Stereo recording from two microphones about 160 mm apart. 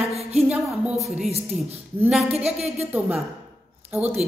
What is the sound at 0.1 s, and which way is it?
Music, 40° right (ahead or behind).